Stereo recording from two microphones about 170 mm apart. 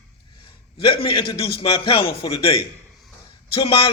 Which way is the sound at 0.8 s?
30° left (ahead or behind).